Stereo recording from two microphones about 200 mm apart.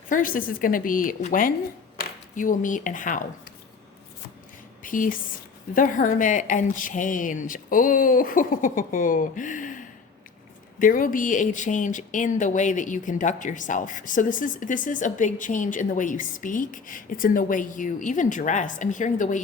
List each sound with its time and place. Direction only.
0.1 s a woman's voice: 45° left (ahead or behind)
4.8 s speech: 45° left (ahead or behind)